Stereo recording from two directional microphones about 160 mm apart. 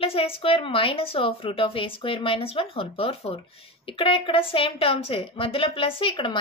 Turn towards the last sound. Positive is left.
turn(degrees=30)  # may be behind; listen again after turning